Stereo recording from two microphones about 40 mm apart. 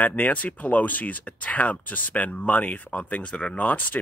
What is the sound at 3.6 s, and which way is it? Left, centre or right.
Speech, left.